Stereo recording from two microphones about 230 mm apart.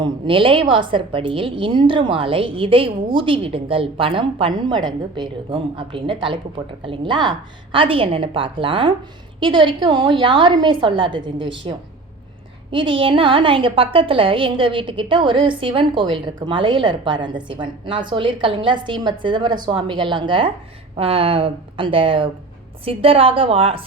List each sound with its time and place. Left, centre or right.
0.0 s a woman's voice: right